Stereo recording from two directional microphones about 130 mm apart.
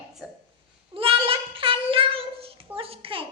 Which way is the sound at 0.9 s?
45° right (ahead or behind).